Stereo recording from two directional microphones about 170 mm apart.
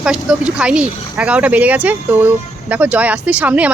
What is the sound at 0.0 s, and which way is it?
Speech, 5° right (ahead or behind).